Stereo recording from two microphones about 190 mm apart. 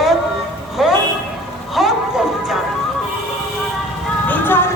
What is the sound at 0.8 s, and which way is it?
Vehicle, centre (ahead or behind).